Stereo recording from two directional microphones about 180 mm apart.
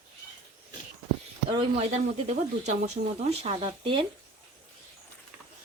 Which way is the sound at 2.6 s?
40° right (ahead or behind).